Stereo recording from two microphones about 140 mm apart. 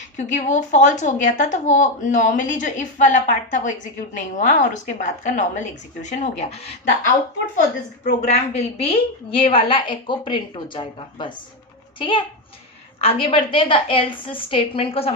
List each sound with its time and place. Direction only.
0.2 s speech: 60° left (ahead or behind)
8.0 s a woman's voice: 55° left (ahead or behind)